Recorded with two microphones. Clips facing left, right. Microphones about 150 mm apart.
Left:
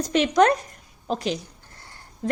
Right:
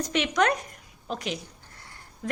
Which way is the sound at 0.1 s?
35° left (ahead or behind).